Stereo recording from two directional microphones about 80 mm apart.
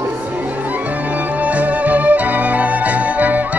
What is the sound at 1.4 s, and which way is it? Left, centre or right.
Music, centre.